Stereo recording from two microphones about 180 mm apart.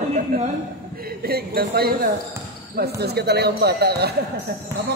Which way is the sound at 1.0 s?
55° right (ahead or behind).